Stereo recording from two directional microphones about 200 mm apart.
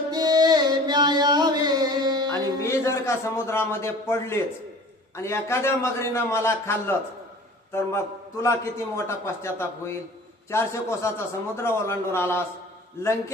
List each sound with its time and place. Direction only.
0.1 s music: 20° right (ahead or behind)
2.6 s a man's voice: 15° left (ahead or behind)